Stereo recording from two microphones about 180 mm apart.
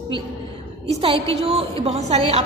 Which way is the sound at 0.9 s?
30° right (ahead or behind).